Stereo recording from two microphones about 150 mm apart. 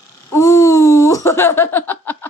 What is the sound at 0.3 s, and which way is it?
Laughter, 20° left (ahead or behind).